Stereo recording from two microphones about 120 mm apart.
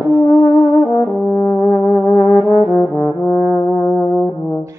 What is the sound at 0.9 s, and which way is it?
Brass instrument, 15° left (ahead or behind).